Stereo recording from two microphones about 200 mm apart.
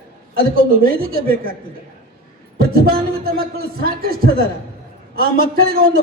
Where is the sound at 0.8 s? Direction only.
45° right (ahead or behind).